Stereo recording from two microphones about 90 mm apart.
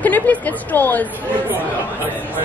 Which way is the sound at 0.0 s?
20° left (ahead or behind).